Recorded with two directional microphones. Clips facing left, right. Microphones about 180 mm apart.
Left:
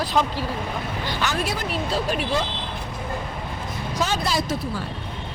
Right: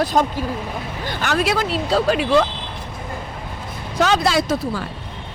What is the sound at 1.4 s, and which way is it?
Speech, 90° right.